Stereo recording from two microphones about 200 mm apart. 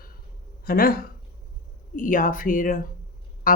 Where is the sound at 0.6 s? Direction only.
45° left (ahead or behind).